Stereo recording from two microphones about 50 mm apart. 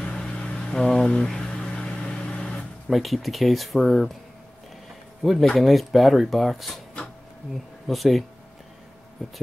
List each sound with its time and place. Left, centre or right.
0.0 s a sound: centre
2.2 s vehicle: left
2.9 s speech: centre
5.2 s speech: centre
7.9 s speech: centre